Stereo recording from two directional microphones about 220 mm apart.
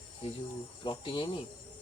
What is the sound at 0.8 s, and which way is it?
Speech, 25° left (ahead or behind).